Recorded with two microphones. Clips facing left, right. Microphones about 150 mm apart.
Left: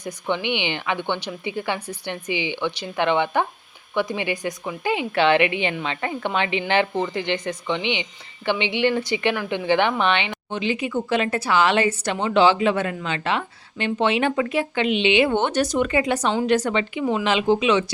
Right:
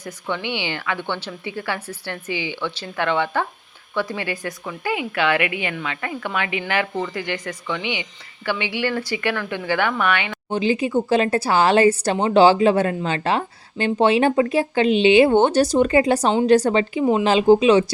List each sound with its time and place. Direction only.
0.0 s a woman's voice: 20° left (ahead or behind)
10.5 s a woman's voice: 35° right (ahead or behind)